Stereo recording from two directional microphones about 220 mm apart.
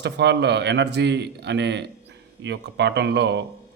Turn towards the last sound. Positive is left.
turn(degrees=-50)  # may be behind; listen again after turning